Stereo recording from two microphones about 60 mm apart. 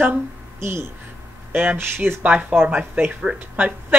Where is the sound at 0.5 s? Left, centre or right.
Right.